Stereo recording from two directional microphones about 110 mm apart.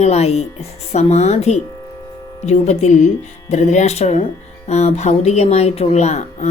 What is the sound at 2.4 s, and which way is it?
A woman's voice, 90° left.